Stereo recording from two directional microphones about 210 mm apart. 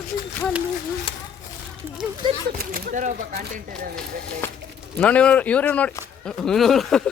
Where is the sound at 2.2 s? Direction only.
20° right (ahead or behind).